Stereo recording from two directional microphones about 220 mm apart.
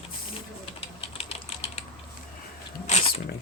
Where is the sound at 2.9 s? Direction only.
30° left (ahead or behind).